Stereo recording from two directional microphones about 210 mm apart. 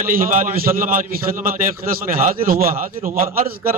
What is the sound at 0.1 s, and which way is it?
A man's voice, 40° right (ahead or behind).